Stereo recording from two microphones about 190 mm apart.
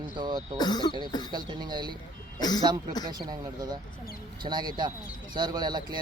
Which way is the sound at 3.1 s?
20° right (ahead or behind).